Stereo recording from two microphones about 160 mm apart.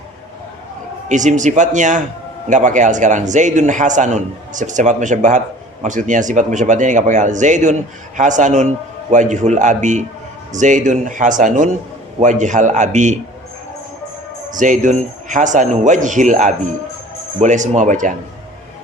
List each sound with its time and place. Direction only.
1.0 s a man's voice: 50° right (ahead or behind)
14.5 s a man's voice: 55° right (ahead or behind)